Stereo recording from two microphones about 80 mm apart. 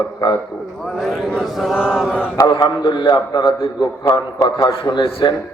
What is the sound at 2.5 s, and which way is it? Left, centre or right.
A man's voice, left.